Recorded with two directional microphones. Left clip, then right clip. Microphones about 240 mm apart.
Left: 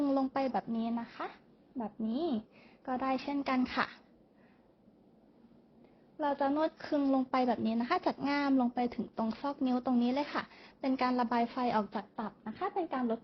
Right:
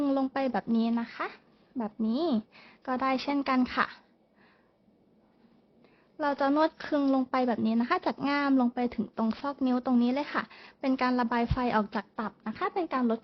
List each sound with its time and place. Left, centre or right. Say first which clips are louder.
0.0 s a woman's voice: right 3 dB; centre
6.1 s speech: right 5 dB; right